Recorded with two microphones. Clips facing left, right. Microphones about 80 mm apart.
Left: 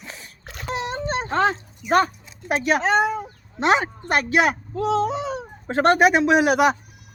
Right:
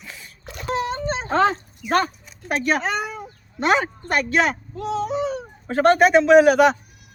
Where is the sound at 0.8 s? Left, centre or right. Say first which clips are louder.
Right 3 dB; centre.